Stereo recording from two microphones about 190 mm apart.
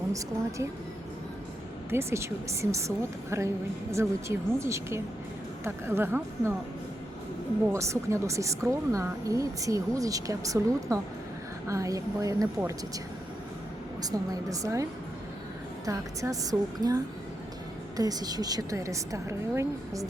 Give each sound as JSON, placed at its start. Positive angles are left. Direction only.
{"t": 0.1, "sound": "speech", "side_deg": -15}
{"t": 1.9, "sound": "speech", "side_deg": -15}
{"t": 7.7, "sound": "speech", "side_deg": -15}
{"t": 14.0, "sound": "speech", "side_deg": -20}
{"t": 15.9, "sound": "speech", "side_deg": -15}